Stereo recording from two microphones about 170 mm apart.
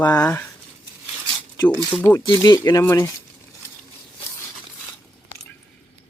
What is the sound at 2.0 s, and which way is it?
Speech, 10° left (ahead or behind).